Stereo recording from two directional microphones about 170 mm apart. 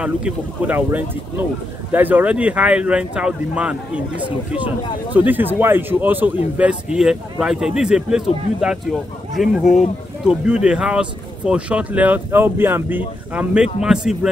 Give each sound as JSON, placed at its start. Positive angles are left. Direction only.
{"t": 0.0, "sound": "speech", "side_deg": -5}
{"t": 5.1, "sound": "speech", "side_deg": -10}